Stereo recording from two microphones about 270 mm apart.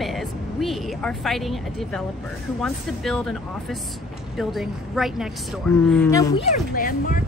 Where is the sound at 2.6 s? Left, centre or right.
Centre.